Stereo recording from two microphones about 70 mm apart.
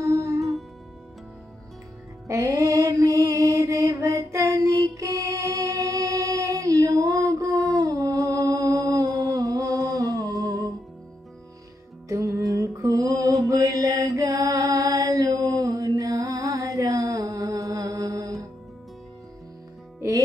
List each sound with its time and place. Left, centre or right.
0.0 s music: right
2.2 s mantra: right
12.1 s mantra: right